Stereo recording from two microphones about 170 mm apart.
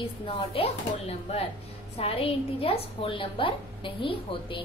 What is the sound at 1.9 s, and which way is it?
A woman's voice, 35° left (ahead or behind).